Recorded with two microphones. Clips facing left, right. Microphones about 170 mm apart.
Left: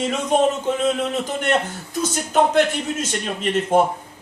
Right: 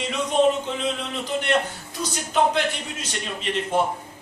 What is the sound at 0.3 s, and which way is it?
A man's voice, 50° left (ahead or behind).